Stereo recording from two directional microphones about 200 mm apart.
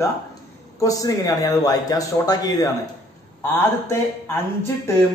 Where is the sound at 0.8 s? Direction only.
15° left (ahead or behind).